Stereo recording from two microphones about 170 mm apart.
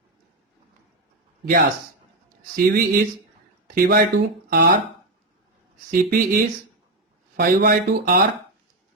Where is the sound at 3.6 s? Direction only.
55° right (ahead or behind).